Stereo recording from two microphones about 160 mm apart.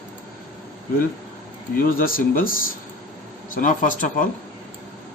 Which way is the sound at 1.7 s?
65° left (ahead or behind).